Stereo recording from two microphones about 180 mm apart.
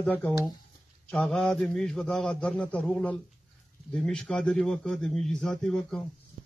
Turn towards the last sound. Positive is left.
turn(degrees=0)  # may be behind; listen again after turning